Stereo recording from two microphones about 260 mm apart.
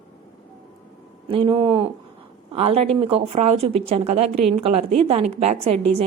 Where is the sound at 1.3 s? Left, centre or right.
Centre.